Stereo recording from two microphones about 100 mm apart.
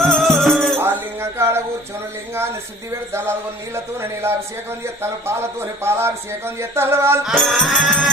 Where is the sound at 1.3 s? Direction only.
25° right (ahead or behind).